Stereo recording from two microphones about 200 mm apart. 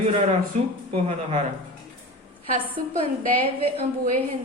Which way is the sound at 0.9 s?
30° right (ahead or behind).